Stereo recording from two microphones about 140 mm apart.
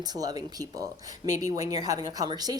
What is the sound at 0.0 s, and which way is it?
Speech, 30° right (ahead or behind).